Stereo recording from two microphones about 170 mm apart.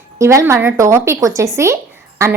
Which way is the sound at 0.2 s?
15° right (ahead or behind).